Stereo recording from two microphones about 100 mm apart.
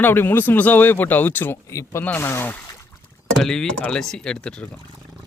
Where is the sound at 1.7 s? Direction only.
35° left (ahead or behind).